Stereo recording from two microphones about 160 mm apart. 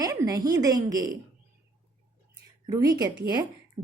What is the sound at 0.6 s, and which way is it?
Speech, 25° right (ahead or behind).